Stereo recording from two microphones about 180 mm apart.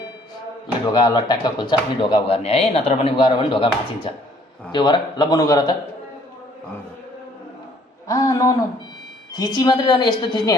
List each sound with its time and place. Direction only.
0.9 s speech: 25° left (ahead or behind)
8.0 s speech: 15° left (ahead or behind)